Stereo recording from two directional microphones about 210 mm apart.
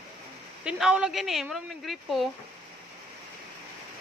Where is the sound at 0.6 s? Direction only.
5° right (ahead or behind).